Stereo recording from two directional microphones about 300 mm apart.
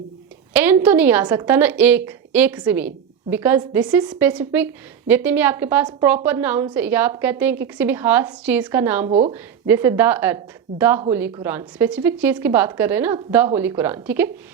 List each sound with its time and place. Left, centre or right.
0.5 s a woman's voice: centre
9.0 s speech: right
9.3 s a woman's voice: centre